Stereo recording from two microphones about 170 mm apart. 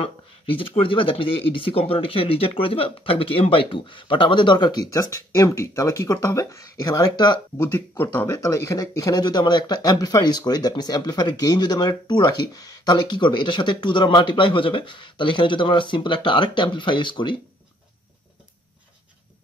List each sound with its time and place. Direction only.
0.6 s speech: 30° left (ahead or behind)